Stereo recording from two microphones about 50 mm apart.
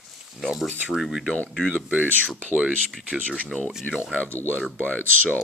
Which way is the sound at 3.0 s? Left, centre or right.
Centre.